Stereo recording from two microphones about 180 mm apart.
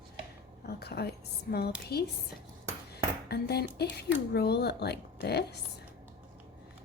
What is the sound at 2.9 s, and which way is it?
A woman's voice, 65° left (ahead or behind).